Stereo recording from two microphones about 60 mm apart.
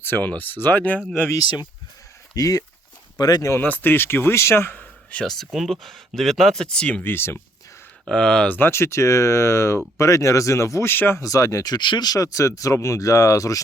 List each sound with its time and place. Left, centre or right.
0.0 s speech: left
1.3 s speech: left
3.6 s speech: left
5.2 s speech: centre
7.0 s speech: left
8.0 s speech: centre
8.4 s speech: left
8.7 s speech: left
10.8 s speech: left
11.2 s speech: left